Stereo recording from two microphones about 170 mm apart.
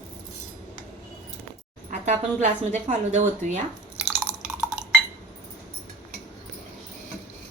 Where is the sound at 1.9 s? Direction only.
45° right (ahead or behind).